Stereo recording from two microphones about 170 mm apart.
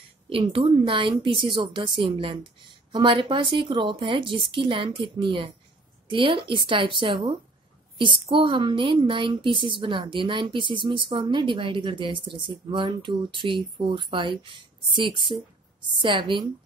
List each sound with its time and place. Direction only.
0.3 s a woman's voice: 30° right (ahead or behind)